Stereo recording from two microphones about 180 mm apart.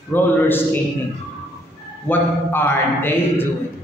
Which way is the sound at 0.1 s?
10° left (ahead or behind).